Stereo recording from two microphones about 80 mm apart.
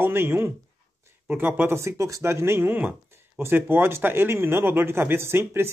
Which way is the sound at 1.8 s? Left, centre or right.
Right.